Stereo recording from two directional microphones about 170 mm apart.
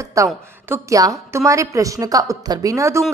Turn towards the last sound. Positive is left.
turn(degrees=-15)  # may be behind; listen again after turning